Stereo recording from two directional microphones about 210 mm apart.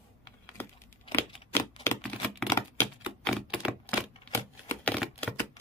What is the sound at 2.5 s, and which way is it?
Typewriter, 15° left (ahead or behind).